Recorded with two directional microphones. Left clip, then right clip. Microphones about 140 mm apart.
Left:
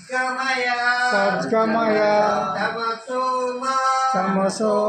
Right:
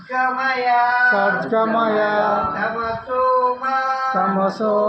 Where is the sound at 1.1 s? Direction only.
15° left (ahead or behind).